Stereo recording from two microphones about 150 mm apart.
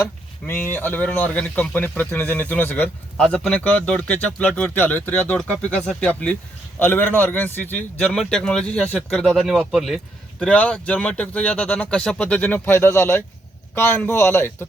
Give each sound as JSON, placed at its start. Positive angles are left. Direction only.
{"t": 0.0, "sound": "a man's voice", "side_deg": 15}